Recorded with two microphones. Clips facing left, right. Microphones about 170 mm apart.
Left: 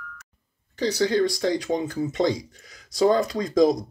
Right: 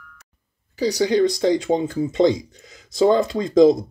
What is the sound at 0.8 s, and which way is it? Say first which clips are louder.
Speech: right 4 dB; 15° right (ahead or behind).